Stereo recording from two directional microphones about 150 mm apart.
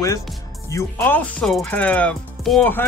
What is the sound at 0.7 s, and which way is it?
Music, 15° left (ahead or behind).